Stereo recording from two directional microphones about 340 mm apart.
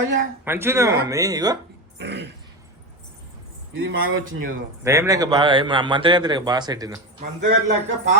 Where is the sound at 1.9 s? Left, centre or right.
Right.